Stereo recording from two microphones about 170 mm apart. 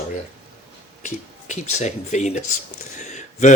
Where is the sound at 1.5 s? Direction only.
45° left (ahead or behind).